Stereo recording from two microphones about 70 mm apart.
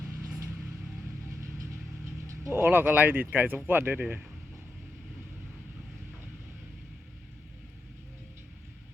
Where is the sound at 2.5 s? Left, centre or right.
Right.